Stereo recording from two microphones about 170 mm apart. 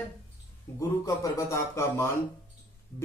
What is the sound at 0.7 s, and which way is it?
Speech, 15° left (ahead or behind).